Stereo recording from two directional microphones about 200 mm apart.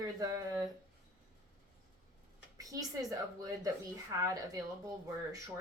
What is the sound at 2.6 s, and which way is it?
Speech, 15° right (ahead or behind).